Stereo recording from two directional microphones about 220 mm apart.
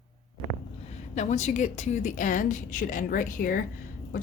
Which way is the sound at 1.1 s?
35° left (ahead or behind).